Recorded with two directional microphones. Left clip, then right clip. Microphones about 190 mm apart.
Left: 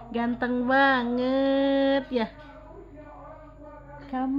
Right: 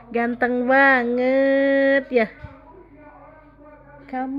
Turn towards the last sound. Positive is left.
turn(degrees=-20)  # may be behind; listen again after turning